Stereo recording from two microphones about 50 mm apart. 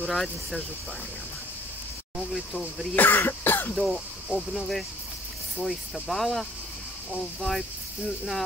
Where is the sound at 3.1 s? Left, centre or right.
Left.